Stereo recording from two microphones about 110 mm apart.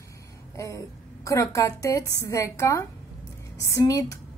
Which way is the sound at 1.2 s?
30° left (ahead or behind).